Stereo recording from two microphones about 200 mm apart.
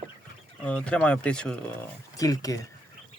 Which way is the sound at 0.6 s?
5° left (ahead or behind).